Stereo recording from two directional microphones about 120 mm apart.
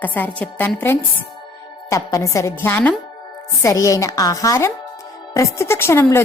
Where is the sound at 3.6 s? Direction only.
30° left (ahead or behind).